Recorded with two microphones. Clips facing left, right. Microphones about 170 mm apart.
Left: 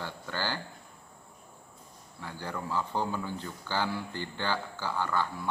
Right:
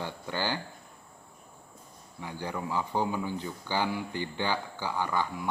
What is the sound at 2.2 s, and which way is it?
Speech, 15° right (ahead or behind).